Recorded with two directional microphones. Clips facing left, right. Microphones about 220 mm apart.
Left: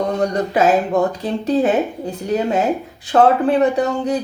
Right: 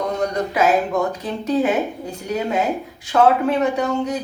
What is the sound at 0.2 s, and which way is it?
Speech, 30° left (ahead or behind).